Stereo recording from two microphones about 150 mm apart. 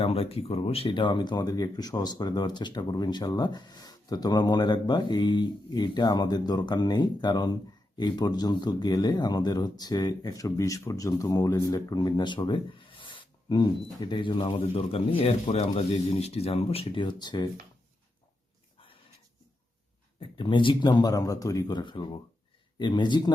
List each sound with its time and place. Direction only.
0.0 s speech: 40° left (ahead or behind)
20.1 s speech: 35° left (ahead or behind)